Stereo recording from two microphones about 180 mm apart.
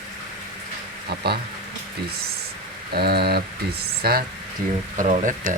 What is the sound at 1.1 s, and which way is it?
Speech, 65° right (ahead or behind).